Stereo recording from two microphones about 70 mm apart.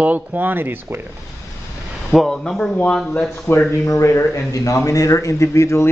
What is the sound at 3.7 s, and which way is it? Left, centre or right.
Speech, left.